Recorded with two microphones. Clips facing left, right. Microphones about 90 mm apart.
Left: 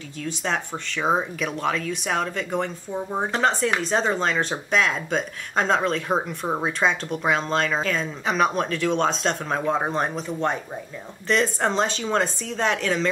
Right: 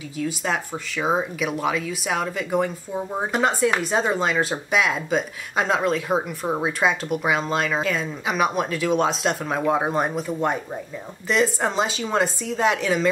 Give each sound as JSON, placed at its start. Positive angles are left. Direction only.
{"t": 0.2, "sound": "speech", "side_deg": -5}